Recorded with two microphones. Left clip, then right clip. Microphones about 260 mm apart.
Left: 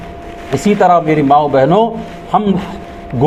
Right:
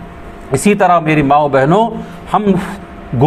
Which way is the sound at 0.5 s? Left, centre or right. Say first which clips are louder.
Even; right.